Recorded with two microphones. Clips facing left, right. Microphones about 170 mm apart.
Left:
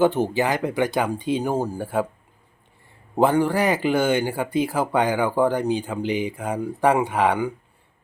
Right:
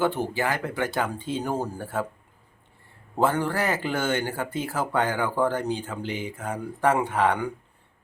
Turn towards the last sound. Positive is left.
turn(degrees=10)  # may be behind; listen again after turning